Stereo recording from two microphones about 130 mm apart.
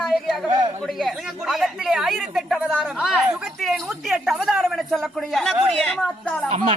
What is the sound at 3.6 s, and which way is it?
Speech, centre (ahead or behind).